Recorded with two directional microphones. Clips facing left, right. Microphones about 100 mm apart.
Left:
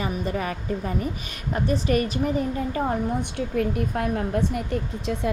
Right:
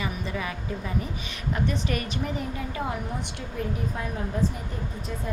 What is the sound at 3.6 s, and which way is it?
Speech, 65° left (ahead or behind).